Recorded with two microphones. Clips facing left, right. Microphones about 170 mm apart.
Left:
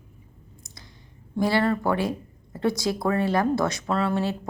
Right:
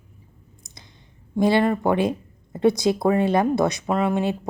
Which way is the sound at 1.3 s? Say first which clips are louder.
Right 4 dB; 20° right (ahead or behind).